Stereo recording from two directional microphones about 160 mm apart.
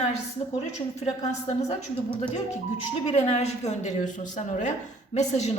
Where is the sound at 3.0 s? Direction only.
45° left (ahead or behind).